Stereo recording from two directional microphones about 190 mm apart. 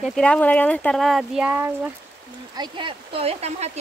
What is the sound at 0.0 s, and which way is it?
Speech, 5° left (ahead or behind).